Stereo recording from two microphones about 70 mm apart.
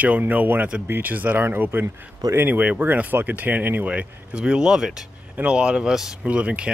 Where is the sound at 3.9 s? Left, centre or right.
Centre.